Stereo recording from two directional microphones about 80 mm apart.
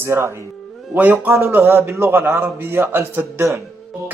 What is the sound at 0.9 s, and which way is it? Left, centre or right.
Speech, right.